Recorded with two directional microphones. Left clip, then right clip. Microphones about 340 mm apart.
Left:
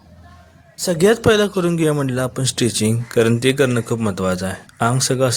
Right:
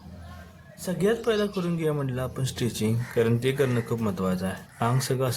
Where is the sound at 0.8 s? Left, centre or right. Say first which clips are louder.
Left 11 dB; right.